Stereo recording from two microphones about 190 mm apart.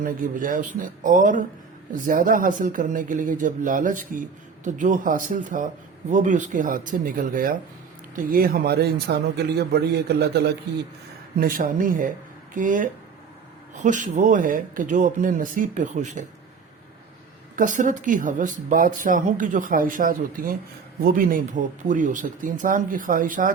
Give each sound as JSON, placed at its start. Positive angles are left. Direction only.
{"t": 0.0, "sound": "a man's voice", "side_deg": -45}
{"t": 11.3, "sound": "speech", "side_deg": -50}
{"t": 17.6, "sound": "speech", "side_deg": -45}